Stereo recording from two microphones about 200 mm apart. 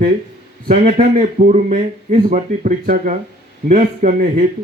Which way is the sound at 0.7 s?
30° right (ahead or behind).